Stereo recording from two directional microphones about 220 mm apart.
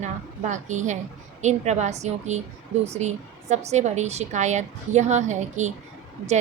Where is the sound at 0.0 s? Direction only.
35° right (ahead or behind).